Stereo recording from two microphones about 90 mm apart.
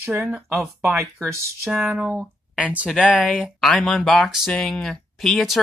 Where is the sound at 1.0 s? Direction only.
30° right (ahead or behind).